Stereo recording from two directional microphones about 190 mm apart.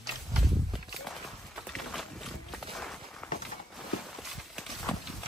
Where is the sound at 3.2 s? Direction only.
5° left (ahead or behind).